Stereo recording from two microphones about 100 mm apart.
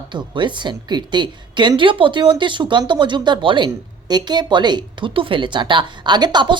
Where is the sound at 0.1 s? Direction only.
50° right (ahead or behind).